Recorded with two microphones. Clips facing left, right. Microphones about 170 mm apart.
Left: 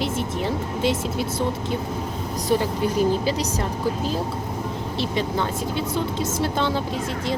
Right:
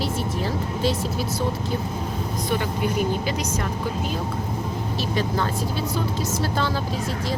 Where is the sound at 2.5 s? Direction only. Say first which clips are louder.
Left 4 dB; 30° left (ahead or behind).